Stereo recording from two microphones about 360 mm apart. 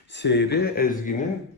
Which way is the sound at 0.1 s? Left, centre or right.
Left.